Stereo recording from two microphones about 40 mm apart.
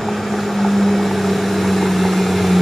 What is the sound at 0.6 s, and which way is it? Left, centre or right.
Vehicle, centre.